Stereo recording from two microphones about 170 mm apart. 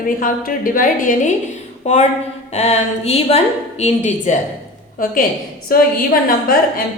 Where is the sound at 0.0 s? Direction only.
55° left (ahead or behind).